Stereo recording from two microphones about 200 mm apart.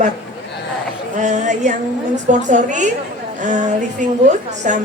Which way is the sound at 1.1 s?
35° right (ahead or behind).